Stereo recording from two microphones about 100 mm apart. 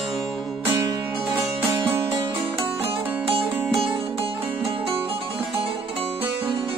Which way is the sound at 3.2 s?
70° right (ahead or behind).